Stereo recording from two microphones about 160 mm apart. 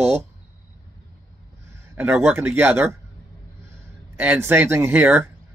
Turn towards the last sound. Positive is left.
turn(degrees=-10)  # may be behind; listen again after turning